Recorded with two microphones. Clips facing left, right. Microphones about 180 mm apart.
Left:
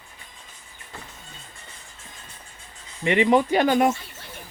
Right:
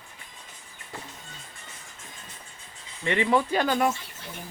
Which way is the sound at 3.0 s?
15° left (ahead or behind).